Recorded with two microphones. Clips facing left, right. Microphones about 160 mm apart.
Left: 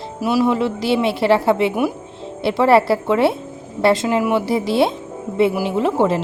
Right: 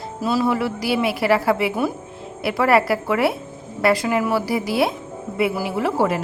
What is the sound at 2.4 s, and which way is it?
A woman's voice, 25° left (ahead or behind).